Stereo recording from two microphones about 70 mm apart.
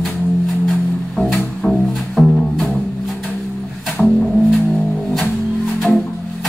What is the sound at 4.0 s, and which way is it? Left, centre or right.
Music, centre.